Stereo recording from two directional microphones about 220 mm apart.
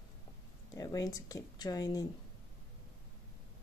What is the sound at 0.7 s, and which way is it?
Speech, 15° left (ahead or behind).